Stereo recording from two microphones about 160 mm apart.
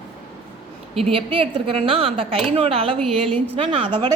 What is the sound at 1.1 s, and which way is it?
A woman's voice, 35° right (ahead or behind).